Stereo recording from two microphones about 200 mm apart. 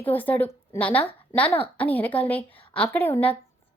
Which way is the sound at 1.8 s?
10° left (ahead or behind).